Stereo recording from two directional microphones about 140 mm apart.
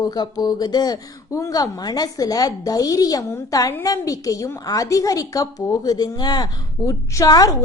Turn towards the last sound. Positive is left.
turn(degrees=25)  # may be behind; listen again after turning